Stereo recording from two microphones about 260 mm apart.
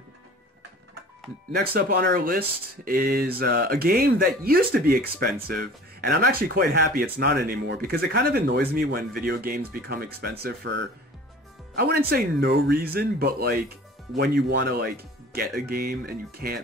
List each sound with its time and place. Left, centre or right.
1.5 s speech: right